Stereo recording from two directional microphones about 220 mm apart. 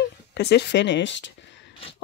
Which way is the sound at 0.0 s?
50° left (ahead or behind).